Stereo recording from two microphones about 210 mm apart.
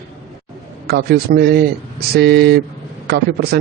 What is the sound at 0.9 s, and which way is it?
A man's voice, 50° right (ahead or behind).